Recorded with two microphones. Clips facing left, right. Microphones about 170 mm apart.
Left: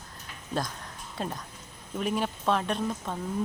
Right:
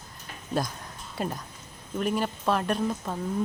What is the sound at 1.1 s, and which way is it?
Speech, 5° right (ahead or behind).